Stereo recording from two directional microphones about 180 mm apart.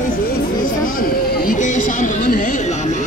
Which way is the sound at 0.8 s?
50° left (ahead or behind).